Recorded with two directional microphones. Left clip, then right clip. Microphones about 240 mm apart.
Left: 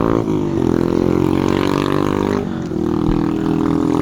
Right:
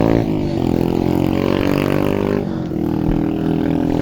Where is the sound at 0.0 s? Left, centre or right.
Right.